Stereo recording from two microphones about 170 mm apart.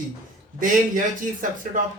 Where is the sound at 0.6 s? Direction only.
50° right (ahead or behind).